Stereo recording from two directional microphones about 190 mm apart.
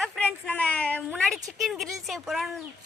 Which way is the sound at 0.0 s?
5° left (ahead or behind).